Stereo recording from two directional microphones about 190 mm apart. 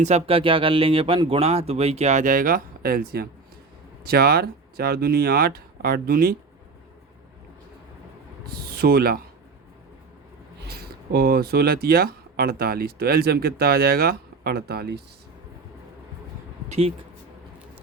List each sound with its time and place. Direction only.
0.0 s speech: 30° right (ahead or behind); by 6.3 s 50° right (ahead or behind)
8.5 s speech: 55° right (ahead or behind)
10.7 s speech: 55° right (ahead or behind)
16.6 s speech: 35° right (ahead or behind)